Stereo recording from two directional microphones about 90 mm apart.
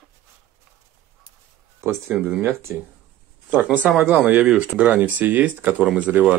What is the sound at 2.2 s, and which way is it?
Speech, 20° right (ahead or behind).